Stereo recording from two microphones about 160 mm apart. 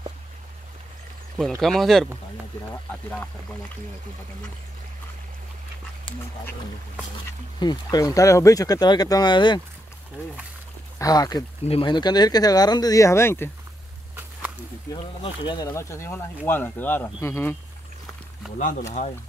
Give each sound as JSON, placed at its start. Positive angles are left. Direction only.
{"t": 1.6, "sound": "speech", "side_deg": 0}
{"t": 7.5, "sound": "speech", "side_deg": 25}
{"t": 11.0, "sound": "speech", "side_deg": 25}
{"t": 15.4, "sound": "speech", "side_deg": 25}
{"t": 18.6, "sound": "speech", "side_deg": 55}